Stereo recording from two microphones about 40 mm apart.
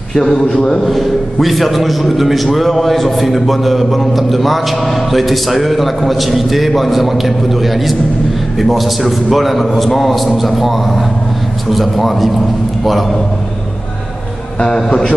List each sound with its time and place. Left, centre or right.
0.1 s a man's voice: centre
0.8 s a man's voice: centre